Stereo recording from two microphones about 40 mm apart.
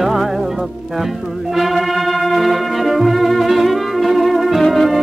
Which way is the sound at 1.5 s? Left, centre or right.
Centre.